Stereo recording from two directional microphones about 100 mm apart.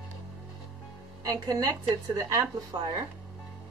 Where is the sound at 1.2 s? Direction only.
35° right (ahead or behind).